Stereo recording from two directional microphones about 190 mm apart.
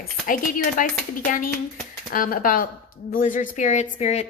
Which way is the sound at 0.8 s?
45° left (ahead or behind).